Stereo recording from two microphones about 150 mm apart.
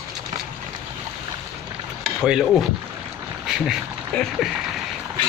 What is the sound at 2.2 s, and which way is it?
Speech, 5° right (ahead or behind).